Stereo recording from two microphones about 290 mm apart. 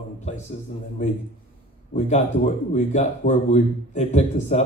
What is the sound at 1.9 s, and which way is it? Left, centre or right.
A man's voice, left.